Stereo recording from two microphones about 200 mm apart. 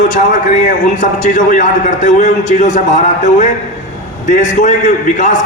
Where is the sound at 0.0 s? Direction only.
40° left (ahead or behind).